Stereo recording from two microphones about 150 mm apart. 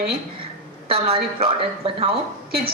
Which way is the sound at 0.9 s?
35° right (ahead or behind).